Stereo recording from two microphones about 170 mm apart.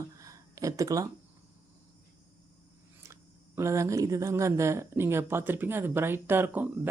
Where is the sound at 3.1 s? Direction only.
15° right (ahead or behind).